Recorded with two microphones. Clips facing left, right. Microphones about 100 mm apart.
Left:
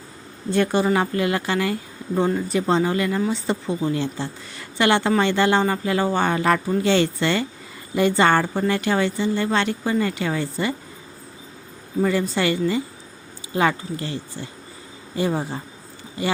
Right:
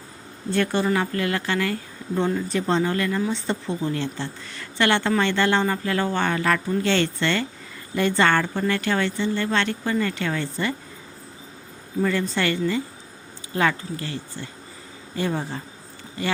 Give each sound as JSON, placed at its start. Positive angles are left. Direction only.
{"t": 0.5, "sound": "speech", "side_deg": 15}
{"t": 6.7, "sound": "speech", "side_deg": 10}
{"t": 12.0, "sound": "speech", "side_deg": 15}